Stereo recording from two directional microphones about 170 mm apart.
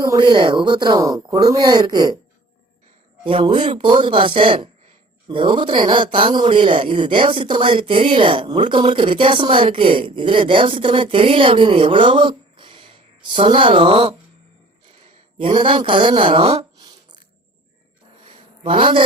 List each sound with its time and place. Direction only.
0.0 s speech: 20° right (ahead or behind)
3.2 s speech: 30° right (ahead or behind)
15.4 s speech: 30° right (ahead or behind)
18.6 s speech: 30° right (ahead or behind)